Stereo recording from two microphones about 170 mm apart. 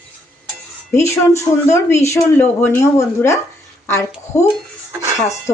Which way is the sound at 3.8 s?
15° left (ahead or behind).